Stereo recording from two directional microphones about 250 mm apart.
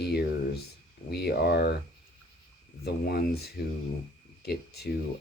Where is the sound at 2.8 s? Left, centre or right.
Left.